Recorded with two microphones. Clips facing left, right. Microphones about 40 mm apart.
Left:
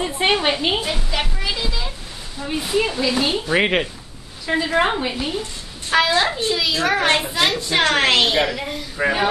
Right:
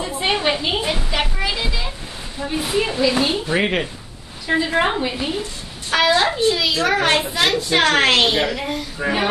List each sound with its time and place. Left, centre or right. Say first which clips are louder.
0.0 s a sound: left 2 dB; left
0.8 s a child's voice: right 2 dB; centre
3.5 s speech: left 3 dB; centre
4.5 s a woman's voice: even; centre